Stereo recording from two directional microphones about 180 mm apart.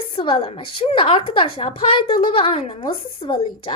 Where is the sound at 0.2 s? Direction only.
30° left (ahead or behind).